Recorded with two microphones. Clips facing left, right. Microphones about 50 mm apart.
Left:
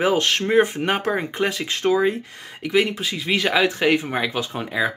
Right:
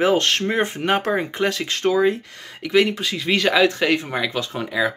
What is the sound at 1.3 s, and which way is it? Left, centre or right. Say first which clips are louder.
Speech: right 1 dB; centre.